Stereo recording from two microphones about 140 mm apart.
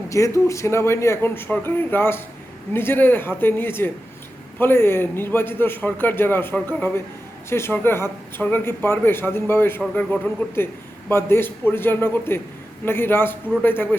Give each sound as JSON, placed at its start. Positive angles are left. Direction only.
{"t": 0.1, "sound": "a man's voice", "side_deg": 20}